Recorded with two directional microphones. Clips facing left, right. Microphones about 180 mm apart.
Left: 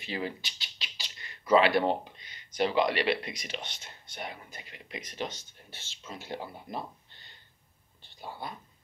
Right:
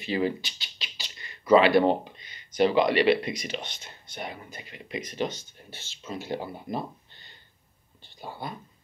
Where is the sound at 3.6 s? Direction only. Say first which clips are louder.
Right 3 dB; 45° right (ahead or behind).